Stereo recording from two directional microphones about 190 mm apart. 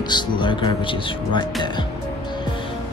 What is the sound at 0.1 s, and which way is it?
Speech, 25° left (ahead or behind).